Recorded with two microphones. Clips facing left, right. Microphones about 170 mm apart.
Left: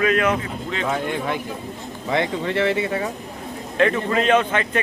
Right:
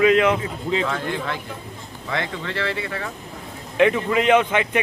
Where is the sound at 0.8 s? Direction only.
20° left (ahead or behind).